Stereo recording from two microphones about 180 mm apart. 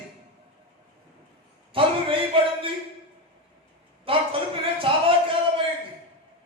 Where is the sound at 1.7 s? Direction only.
30° right (ahead or behind).